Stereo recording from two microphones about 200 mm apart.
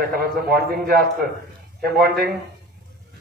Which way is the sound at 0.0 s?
50° right (ahead or behind).